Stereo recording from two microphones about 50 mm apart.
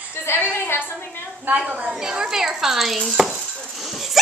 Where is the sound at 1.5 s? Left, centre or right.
Centre.